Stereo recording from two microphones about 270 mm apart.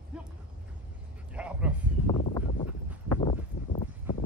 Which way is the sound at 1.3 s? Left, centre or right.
Centre.